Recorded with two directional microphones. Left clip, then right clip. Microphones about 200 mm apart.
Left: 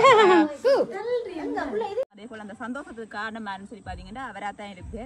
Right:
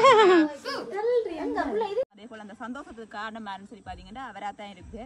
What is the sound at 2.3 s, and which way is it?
Speech, 10° right (ahead or behind).